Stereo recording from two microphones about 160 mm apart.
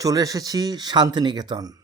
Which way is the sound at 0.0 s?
20° right (ahead or behind).